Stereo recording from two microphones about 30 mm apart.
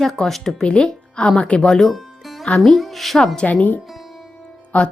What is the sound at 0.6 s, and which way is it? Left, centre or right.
Speech, left.